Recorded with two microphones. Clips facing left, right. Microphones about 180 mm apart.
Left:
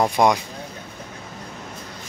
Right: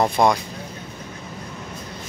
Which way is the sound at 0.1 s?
15° left (ahead or behind).